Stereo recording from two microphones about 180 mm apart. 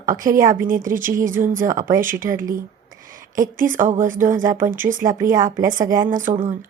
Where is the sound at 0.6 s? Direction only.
50° right (ahead or behind).